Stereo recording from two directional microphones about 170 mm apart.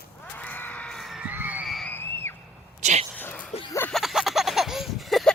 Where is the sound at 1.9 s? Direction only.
10° left (ahead or behind).